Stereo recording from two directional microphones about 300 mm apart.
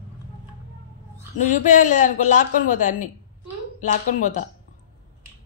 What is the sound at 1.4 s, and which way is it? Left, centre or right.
Speech, left.